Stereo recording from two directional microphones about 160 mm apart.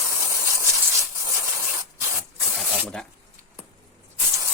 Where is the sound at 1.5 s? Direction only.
15° right (ahead or behind).